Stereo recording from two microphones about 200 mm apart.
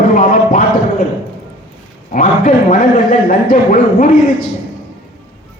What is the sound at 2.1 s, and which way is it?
A man's voice, 45° left (ahead or behind).